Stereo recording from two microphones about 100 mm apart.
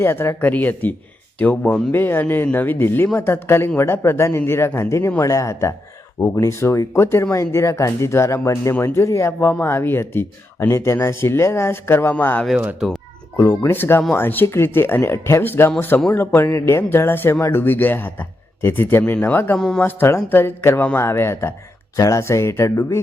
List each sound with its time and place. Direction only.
0.0 s a man's voice: 25° left (ahead or behind)
19.5 s speech: 5° left (ahead or behind)
19.8 s speech: 20° left (ahead or behind)